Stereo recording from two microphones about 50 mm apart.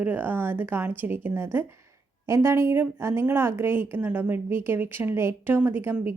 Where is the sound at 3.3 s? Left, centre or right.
Right.